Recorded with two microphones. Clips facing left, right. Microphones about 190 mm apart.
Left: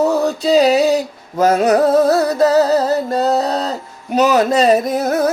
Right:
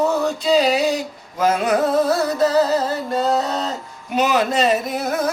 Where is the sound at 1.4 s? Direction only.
40° left (ahead or behind).